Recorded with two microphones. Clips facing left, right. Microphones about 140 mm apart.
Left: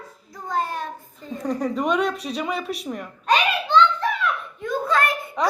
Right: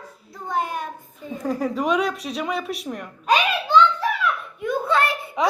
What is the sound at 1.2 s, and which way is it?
Speech, 5° right (ahead or behind).